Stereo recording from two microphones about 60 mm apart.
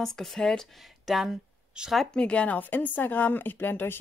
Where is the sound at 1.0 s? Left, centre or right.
Centre.